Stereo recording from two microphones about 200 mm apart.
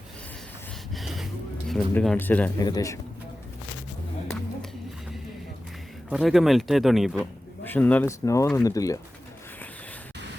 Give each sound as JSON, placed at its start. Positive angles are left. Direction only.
{"t": 0.9, "sound": "a sound", "side_deg": 0}
{"t": 2.6, "sound": "speech", "side_deg": 20}
{"t": 6.1, "sound": "speech", "side_deg": 0}